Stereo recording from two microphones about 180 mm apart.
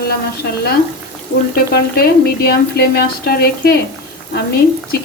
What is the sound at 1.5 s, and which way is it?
Speech, 60° left (ahead or behind).